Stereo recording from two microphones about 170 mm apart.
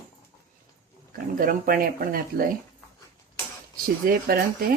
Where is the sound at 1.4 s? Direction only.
55° right (ahead or behind).